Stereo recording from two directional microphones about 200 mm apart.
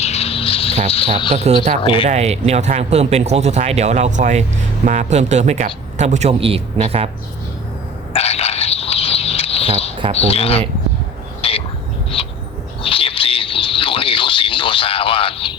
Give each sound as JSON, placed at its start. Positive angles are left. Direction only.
{"t": 0.0, "sound": "a sound", "side_deg": 30}
{"t": 0.9, "sound": "speech", "side_deg": 30}
{"t": 2.0, "sound": "speech", "side_deg": -35}
{"t": 8.1, "sound": "a sound", "side_deg": 30}
{"t": 10.2, "sound": "speech", "side_deg": 30}
{"t": 11.4, "sound": "vehicle", "side_deg": 30}
{"t": 12.1, "sound": "bird", "side_deg": 25}